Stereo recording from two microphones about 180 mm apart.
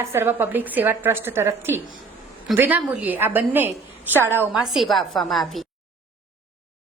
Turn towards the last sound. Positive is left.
turn(degrees=0)  # may be behind; listen again after turning